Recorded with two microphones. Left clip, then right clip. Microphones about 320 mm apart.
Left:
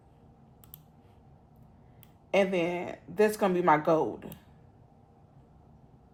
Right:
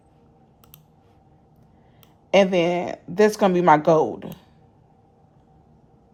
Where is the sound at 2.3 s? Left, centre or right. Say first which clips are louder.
Right 9 dB; right.